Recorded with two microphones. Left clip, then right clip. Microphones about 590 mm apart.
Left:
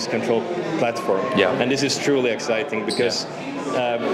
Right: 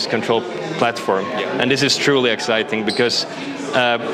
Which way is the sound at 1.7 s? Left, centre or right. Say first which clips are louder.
Right 5 dB; right.